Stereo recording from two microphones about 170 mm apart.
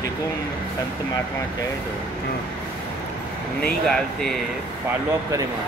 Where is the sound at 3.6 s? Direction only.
5° left (ahead or behind).